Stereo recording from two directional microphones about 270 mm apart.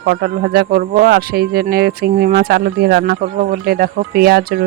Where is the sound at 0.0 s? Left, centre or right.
Right.